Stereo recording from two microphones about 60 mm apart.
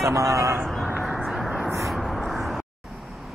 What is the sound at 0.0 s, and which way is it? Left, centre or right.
Speech, right.